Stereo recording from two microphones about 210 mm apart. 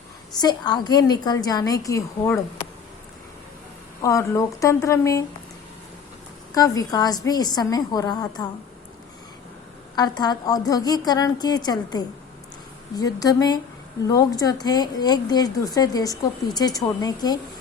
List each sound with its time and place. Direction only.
0.3 s a woman's voice: 20° left (ahead or behind)
4.0 s speech: 15° left (ahead or behind)
6.5 s a woman's voice: 15° left (ahead or behind)
9.9 s a woman's voice: 20° left (ahead or behind)